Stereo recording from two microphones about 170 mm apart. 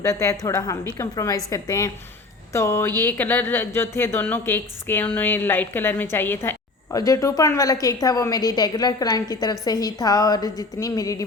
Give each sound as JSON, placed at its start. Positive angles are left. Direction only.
{"t": 0.0, "sound": "a woman's voice", "side_deg": 15}